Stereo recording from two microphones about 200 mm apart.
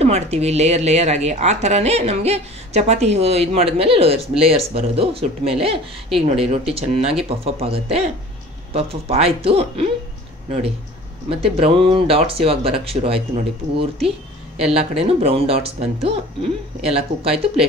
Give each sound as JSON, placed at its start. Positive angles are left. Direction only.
{"t": 0.0, "sound": "a woman's voice", "side_deg": -35}
{"t": 11.2, "sound": "speech", "side_deg": -30}